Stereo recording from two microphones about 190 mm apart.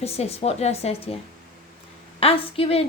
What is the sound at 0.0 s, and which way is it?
A woman's voice, 30° left (ahead or behind).